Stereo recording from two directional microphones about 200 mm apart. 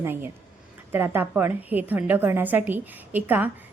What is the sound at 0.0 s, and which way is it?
A woman's voice, 10° right (ahead or behind).